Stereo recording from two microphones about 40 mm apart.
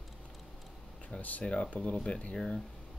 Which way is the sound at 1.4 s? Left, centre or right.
Left.